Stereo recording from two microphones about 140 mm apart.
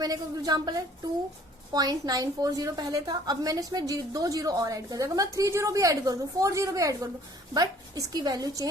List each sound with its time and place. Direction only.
0.0 s a woman's voice: 25° right (ahead or behind)